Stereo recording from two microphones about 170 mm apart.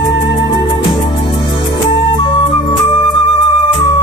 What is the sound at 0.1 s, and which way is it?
Music, 30° left (ahead or behind).